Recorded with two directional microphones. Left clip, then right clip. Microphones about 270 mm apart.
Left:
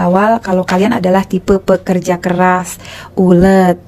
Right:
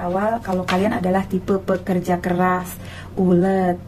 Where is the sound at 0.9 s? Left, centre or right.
Left.